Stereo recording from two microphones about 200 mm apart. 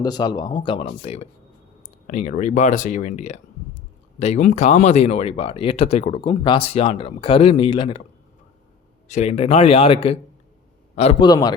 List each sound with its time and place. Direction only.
0.0 s speech: 20° left (ahead or behind)
9.0 s speech: 35° left (ahead or behind)